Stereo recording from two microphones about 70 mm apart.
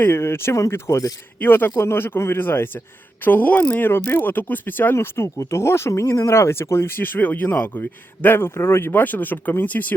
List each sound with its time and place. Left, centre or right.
0.0 s speech: left
1.4 s speech: left
3.8 s speech: left